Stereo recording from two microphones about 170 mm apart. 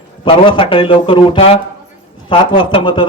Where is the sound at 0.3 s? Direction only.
30° left (ahead or behind).